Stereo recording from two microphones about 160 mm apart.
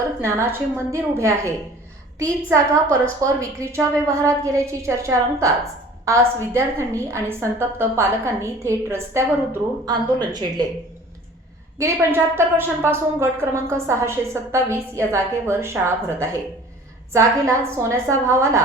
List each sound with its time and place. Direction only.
0.2 s a woman's voice: 15° right (ahead or behind)
2.5 s a woman's voice: 20° right (ahead or behind)
11.8 s a woman's voice: 15° right (ahead or behind)